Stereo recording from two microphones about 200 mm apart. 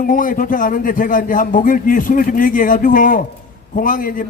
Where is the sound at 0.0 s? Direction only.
40° left (ahead or behind).